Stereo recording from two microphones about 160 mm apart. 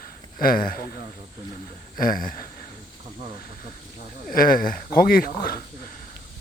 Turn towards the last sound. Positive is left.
turn(degrees=65)  # may be behind; listen again after turning